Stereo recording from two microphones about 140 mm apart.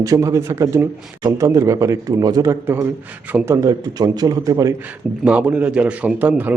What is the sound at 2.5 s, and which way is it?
A man's voice, 15° right (ahead or behind).